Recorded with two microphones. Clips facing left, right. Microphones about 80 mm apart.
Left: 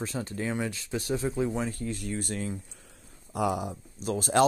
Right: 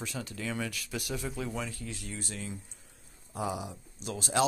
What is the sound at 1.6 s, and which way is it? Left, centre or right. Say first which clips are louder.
Speech: left 8 dB; left.